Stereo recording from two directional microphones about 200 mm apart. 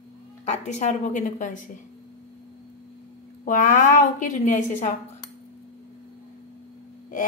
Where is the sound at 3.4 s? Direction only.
40° left (ahead or behind).